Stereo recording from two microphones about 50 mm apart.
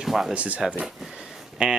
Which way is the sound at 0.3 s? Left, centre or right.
Right.